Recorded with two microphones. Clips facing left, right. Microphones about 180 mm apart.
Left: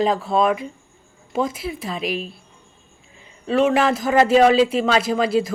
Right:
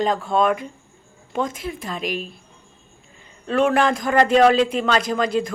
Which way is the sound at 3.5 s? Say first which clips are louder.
Left 1 dB; 5° left (ahead or behind).